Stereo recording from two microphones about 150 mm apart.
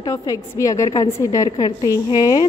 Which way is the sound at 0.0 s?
30° left (ahead or behind).